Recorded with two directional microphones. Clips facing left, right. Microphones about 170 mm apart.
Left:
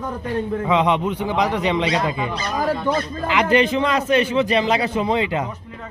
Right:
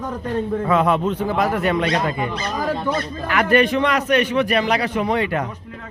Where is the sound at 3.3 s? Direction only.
20° left (ahead or behind).